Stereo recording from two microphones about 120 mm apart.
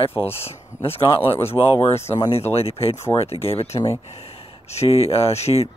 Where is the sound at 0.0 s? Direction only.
55° left (ahead or behind).